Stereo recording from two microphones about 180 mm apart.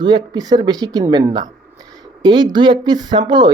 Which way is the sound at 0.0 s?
25° right (ahead or behind).